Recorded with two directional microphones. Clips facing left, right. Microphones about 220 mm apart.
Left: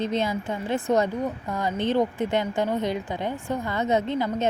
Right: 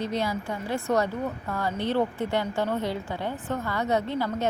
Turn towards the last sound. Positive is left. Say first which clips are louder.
# left 2 dB
turn(degrees=20)  # may be behind; listen again after turning